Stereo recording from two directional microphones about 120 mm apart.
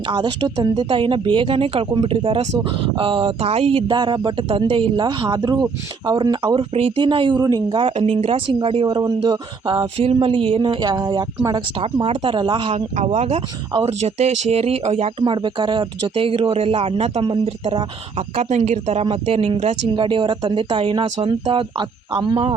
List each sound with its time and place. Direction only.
0.1 s speech: 40° right (ahead or behind)
7.8 s speech: 55° right (ahead or behind)
9.8 s speech: 60° right (ahead or behind); by 11.6 s 35° right (ahead or behind)
11.8 s speech: 50° right (ahead or behind)
13.1 s speech: 60° right (ahead or behind)
15.2 s speech: 45° right (ahead or behind)
18.3 s speech: 65° right (ahead or behind)
19.9 s speech: 45° right (ahead or behind)